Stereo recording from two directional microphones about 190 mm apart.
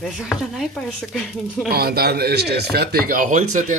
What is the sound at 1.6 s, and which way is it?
Speech, 55° right (ahead or behind).